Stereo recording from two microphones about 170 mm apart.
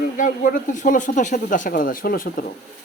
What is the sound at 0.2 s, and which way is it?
Speech, 55° left (ahead or behind).